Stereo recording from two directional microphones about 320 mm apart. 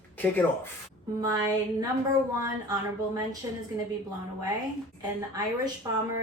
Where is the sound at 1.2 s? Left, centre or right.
Centre.